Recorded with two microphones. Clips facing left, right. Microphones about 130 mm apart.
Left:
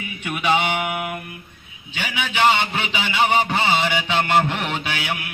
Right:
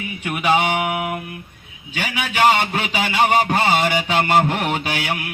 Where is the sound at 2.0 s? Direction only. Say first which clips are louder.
Right 2 dB; 45° right (ahead or behind).